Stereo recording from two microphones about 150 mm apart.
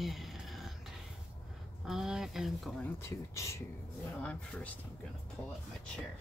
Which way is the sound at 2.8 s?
20° left (ahead or behind).